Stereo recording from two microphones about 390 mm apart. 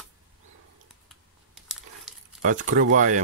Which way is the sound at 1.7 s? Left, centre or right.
Centre.